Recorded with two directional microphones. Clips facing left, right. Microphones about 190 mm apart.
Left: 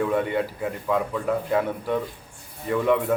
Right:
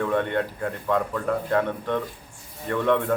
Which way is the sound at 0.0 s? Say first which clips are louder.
Left 1 dB; 5° left (ahead or behind).